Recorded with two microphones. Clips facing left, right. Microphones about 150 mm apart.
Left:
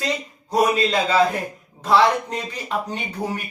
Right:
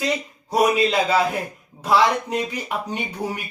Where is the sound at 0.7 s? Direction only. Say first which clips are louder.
Right 1 dB; 10° right (ahead or behind).